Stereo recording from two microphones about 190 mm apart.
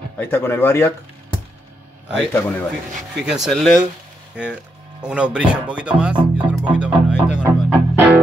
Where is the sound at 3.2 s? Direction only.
Centre (ahead or behind).